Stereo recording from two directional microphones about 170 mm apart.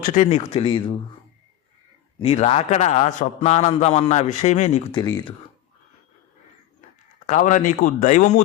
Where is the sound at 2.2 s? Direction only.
35° left (ahead or behind).